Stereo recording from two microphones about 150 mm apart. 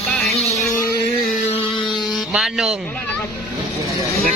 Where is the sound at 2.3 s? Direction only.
5° right (ahead or behind).